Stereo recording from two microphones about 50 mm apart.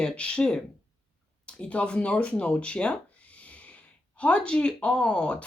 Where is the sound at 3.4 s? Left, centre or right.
Left.